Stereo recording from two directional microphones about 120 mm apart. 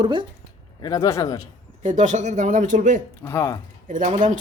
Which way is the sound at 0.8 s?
30° left (ahead or behind).